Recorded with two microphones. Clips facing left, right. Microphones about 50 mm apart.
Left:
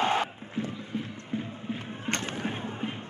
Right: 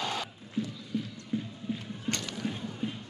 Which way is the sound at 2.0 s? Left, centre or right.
Left.